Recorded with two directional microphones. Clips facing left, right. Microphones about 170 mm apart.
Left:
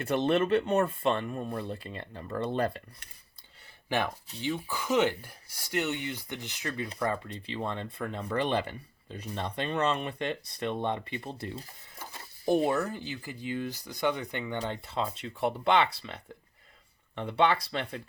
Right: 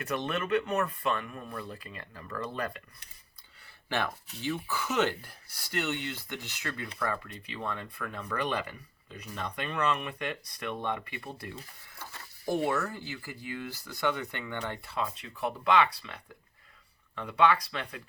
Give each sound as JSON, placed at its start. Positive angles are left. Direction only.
{"t": 0.0, "sound": "speech", "side_deg": 30}
{"t": 3.8, "sound": "speech", "side_deg": 15}